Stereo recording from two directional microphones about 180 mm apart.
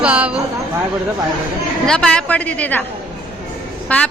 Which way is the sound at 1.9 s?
5° left (ahead or behind).